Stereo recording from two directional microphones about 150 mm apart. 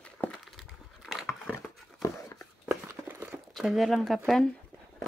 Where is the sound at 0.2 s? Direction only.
5° left (ahead or behind).